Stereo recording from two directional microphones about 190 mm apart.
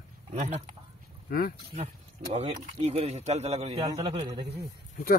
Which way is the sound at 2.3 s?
35° right (ahead or behind).